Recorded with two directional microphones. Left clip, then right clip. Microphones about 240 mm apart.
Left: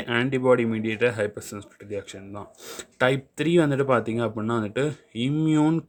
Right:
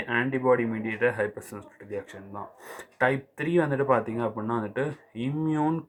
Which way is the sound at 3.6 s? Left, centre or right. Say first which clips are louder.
Left 2 dB; left.